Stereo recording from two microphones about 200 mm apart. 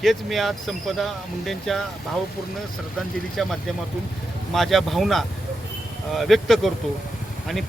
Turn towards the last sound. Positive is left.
turn(degrees=0)  # may be behind; listen again after turning